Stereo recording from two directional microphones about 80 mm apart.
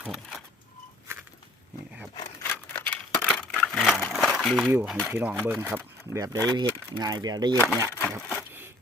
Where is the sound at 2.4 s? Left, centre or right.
Left.